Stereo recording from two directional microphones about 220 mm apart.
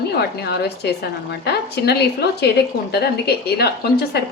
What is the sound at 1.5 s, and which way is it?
A woman's voice, 45° left (ahead or behind).